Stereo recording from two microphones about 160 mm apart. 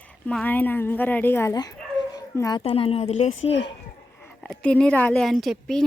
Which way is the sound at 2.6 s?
35° left (ahead or behind).